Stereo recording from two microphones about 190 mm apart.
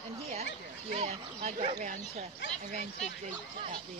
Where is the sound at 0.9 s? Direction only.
35° right (ahead or behind).